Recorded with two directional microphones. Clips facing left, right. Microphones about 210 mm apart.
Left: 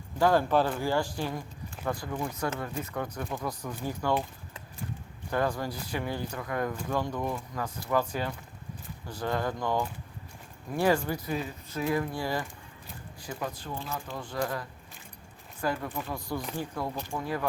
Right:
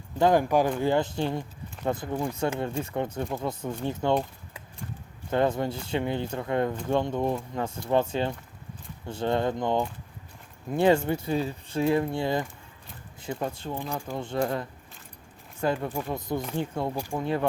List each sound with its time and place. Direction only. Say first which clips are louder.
0.2 s speech: right 2 dB; 20° right (ahead or behind)
5.3 s speech: right 5 dB; 25° right (ahead or behind)